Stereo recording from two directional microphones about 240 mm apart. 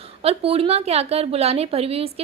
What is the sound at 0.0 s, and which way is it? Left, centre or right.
A woman's voice, right.